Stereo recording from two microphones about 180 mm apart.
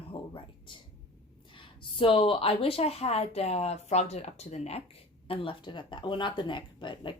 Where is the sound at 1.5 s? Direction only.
30° left (ahead or behind).